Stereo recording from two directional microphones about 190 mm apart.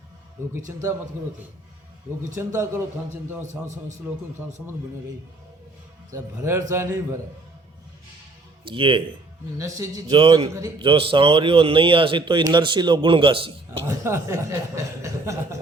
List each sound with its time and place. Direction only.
2.3 s a man's voice: 15° right (ahead or behind)
6.1 s a man's voice: 15° right (ahead or behind)
8.6 s a man's voice: 25° right (ahead or behind)
9.6 s a man's voice: 15° right (ahead or behind)
10.2 s a man's voice: 30° right (ahead or behind)
13.8 s a man's voice: 15° right (ahead or behind)